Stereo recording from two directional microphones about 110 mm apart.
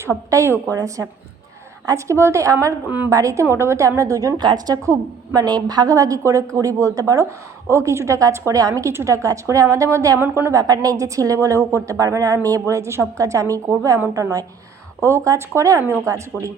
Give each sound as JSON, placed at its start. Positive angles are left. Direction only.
{"t": 0.0, "sound": "a woman's voice", "side_deg": -25}